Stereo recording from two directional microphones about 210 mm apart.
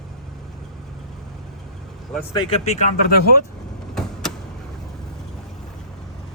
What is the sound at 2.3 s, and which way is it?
Speech, 20° left (ahead or behind).